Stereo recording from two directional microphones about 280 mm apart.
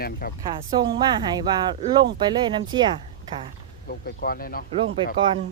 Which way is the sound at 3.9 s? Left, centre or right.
Left.